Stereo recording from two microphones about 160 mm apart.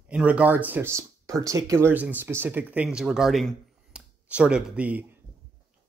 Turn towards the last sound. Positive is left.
turn(degrees=-10)  # may be behind; listen again after turning